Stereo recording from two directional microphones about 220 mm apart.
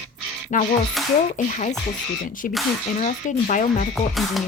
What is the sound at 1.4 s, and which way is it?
Speech, 35° left (ahead or behind).